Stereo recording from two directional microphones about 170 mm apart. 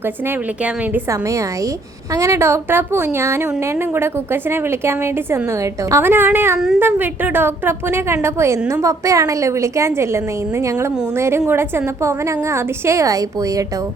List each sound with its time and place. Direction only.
0.6 s a woman's voice: 15° right (ahead or behind)